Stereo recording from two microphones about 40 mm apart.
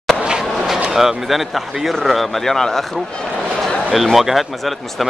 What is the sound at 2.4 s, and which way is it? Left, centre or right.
Speech, centre.